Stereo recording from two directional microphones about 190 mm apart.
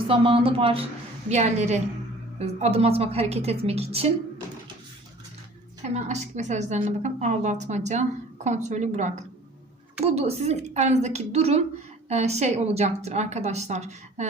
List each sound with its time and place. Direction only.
0.1 s a woman's voice: 30° right (ahead or behind)
5.8 s a woman's voice: 35° right (ahead or behind)